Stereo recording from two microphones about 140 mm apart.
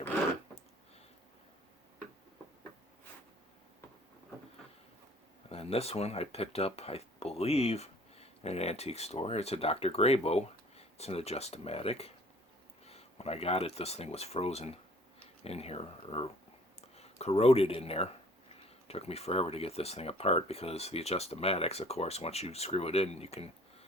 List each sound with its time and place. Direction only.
5.5 s speech: 45° left (ahead or behind)